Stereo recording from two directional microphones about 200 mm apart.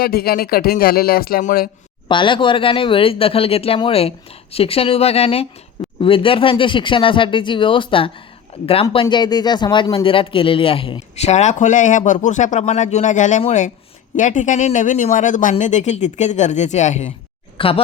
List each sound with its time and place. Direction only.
0.0 s speech: 50° left (ahead or behind)
2.0 s speech: 25° left (ahead or behind)